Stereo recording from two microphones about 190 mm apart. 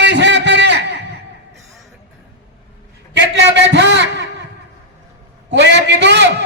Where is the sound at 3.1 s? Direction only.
65° right (ahead or behind).